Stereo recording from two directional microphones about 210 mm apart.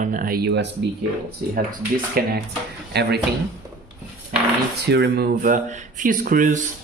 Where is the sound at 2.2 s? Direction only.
45° right (ahead or behind).